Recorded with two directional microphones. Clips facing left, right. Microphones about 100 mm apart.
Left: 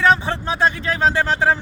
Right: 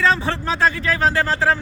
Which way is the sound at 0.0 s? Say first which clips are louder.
Left 2 dB; 15° left (ahead or behind).